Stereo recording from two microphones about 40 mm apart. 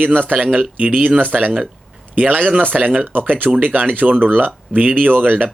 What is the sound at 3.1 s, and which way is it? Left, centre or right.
Speech, right.